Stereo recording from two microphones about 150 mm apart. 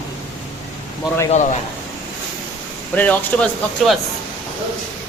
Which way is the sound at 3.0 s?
10° left (ahead or behind).